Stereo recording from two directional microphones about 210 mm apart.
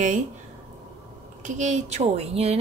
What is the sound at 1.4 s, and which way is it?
A woman's voice, 35° right (ahead or behind).